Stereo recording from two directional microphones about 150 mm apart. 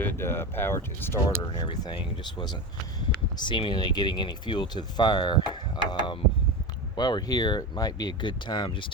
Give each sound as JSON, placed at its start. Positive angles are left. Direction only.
{"t": 0.0, "sound": "speech", "side_deg": 15}
{"t": 1.5, "sound": "speech", "side_deg": 30}
{"t": 3.3, "sound": "speech", "side_deg": 30}